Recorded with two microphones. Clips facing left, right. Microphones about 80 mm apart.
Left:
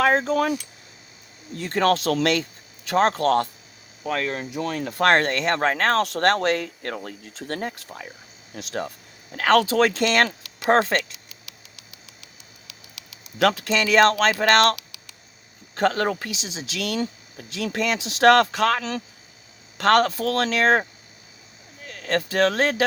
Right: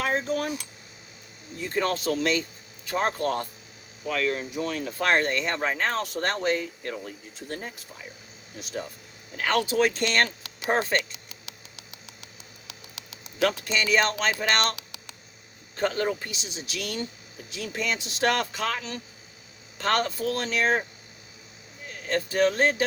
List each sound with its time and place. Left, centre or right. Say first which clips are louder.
0.0 s speech: left 7 dB; left
1.5 s speech: left 6 dB; left
4.0 s speech: left 1 dB; left
4.9 s speech: left 6 dB; left
11.4 s a sound: right 2 dB; right
13.4 s speech: left 5 dB; left
14.8 s a sound: right 3 dB; right
15.7 s speech: left 4 dB; left
21.8 s speech: left 3 dB; left